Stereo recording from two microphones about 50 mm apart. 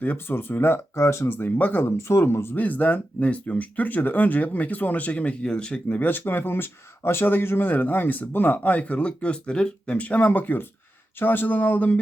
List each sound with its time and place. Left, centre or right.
0.0 s speech: left
0.9 s speech: left
1.3 s speech: left
2.0 s speech: left
2.6 s speech: left
5.4 s speech: centre
6.1 s speech: left